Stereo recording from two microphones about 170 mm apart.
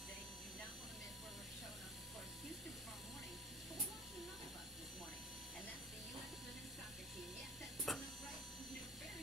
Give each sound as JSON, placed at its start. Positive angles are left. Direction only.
{"t": 7.9, "sound": "electric shaver", "side_deg": 0}